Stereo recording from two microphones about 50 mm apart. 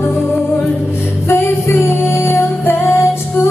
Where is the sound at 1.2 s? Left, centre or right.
Left.